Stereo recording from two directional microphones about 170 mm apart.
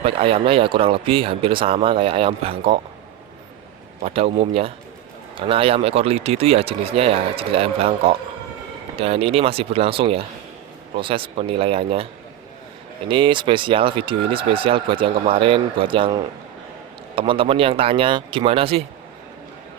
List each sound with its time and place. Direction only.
0.0 s speech: 35° right (ahead or behind)
4.0 s speech: 35° right (ahead or behind)
13.1 s speech: 30° right (ahead or behind)